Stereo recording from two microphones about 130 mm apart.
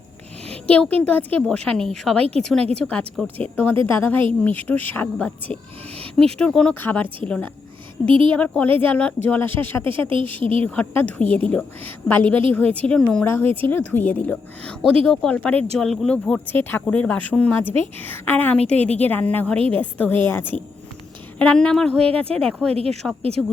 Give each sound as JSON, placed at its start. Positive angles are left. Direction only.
{"t": 0.7, "sound": "a woman's voice", "side_deg": 10}
{"t": 8.0, "sound": "speech", "side_deg": -40}
{"t": 8.3, "sound": "a woman's voice", "side_deg": 10}
{"t": 10.1, "sound": "speech", "side_deg": -45}
{"t": 10.6, "sound": "a woman's voice", "side_deg": 15}
{"t": 13.2, "sound": "a woman's voice", "side_deg": 15}
{"t": 22.7, "sound": "speech", "side_deg": -45}